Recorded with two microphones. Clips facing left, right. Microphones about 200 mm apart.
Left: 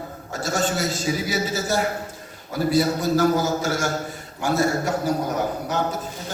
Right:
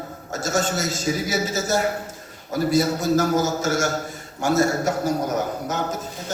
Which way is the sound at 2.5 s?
45° right (ahead or behind).